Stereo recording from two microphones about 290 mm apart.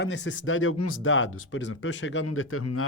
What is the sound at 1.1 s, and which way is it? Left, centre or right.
Speech, left.